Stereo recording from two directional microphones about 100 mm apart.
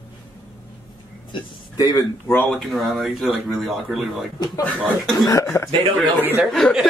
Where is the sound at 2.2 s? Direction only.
20° left (ahead or behind).